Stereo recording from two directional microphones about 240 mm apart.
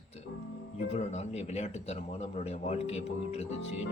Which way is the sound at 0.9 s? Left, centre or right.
Left.